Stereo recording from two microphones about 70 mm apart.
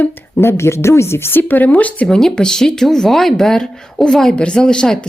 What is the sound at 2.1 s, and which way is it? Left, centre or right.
Speech, centre.